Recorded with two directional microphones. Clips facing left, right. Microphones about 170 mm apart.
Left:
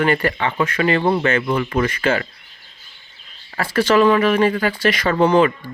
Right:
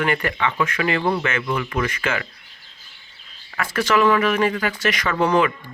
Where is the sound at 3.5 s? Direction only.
30° left (ahead or behind).